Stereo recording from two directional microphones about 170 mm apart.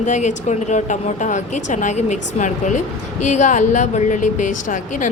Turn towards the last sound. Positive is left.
turn(degrees=50)  # may be behind; listen again after turning